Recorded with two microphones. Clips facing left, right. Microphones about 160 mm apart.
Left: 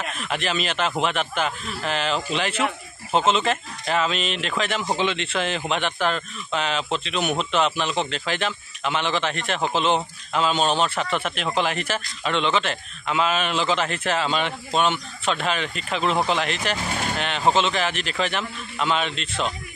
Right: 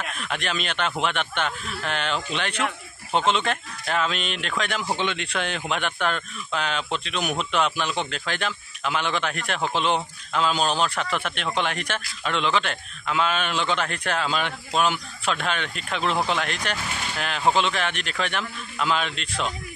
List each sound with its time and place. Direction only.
0.0 s speech: centre (ahead or behind)
16.9 s vehicle: 45° left (ahead or behind)
17.5 s speech: centre (ahead or behind)